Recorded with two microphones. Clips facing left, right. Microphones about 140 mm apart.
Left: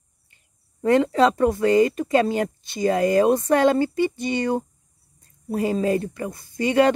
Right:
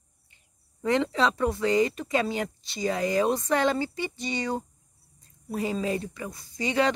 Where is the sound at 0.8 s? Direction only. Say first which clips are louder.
Left 7 dB; 45° left (ahead or behind).